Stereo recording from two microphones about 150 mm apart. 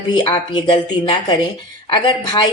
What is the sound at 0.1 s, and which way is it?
A woman's voice, 30° left (ahead or behind).